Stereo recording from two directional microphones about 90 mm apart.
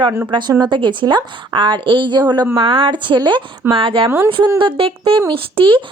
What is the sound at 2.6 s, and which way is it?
Speech, 75° right (ahead or behind).